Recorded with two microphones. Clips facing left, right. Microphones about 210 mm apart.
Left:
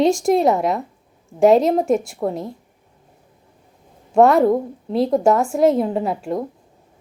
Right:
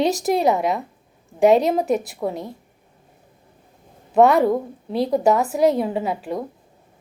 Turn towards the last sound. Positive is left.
turn(degrees=0)  # may be behind; listen again after turning